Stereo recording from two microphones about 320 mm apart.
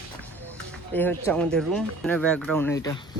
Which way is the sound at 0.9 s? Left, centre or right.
Centre.